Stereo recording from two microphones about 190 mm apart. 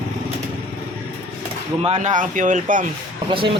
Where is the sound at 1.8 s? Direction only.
35° right (ahead or behind).